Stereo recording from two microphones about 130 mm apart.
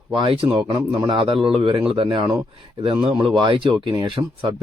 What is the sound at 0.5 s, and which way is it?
Speech, 30° right (ahead or behind).